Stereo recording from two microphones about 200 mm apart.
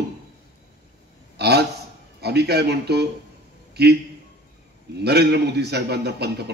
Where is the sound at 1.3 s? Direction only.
55° right (ahead or behind).